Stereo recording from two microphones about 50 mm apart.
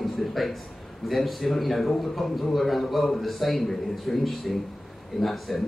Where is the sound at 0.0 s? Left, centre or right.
Centre.